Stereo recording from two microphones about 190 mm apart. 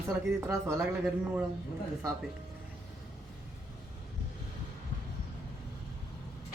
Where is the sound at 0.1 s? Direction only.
10° right (ahead or behind).